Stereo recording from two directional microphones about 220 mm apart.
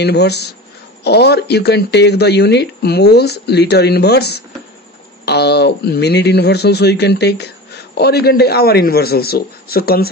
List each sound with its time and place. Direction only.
0.0 s speech: 50° left (ahead or behind)